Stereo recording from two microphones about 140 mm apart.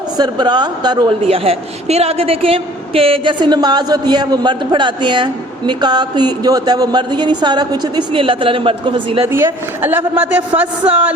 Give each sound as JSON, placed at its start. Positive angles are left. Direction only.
{"t": 0.2, "sound": "a woman's voice", "side_deg": -30}
{"t": 1.3, "sound": "a woman's voice", "side_deg": -45}
{"t": 9.2, "sound": "a man's voice", "side_deg": -15}